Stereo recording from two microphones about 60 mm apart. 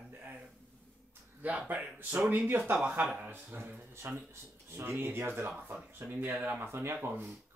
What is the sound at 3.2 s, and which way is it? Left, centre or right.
Speech, right.